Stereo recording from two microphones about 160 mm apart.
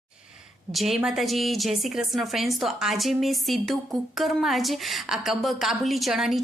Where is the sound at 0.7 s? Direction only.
Centre (ahead or behind).